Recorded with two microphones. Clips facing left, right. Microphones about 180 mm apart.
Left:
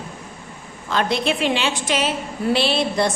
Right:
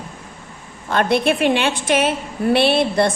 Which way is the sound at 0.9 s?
55° right (ahead or behind).